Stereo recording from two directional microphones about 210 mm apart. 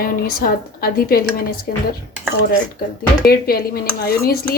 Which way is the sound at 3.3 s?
45° left (ahead or behind).